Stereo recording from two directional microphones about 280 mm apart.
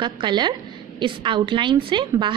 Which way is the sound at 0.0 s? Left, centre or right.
Centre.